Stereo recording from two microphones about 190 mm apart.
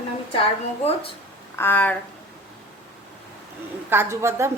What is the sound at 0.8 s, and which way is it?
Speech, 30° left (ahead or behind).